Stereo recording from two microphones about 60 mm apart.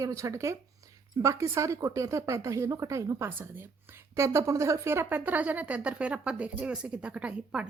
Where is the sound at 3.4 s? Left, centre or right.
Right.